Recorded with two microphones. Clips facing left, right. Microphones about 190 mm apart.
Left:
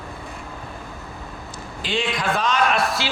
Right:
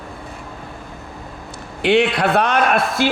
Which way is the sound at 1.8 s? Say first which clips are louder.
Right 9 dB; 65° right (ahead or behind).